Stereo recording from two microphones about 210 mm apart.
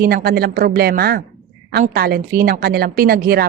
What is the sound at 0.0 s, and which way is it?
A woman's voice, 45° right (ahead or behind).